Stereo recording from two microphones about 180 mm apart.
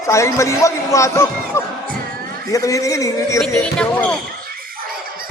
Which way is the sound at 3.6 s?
5° left (ahead or behind).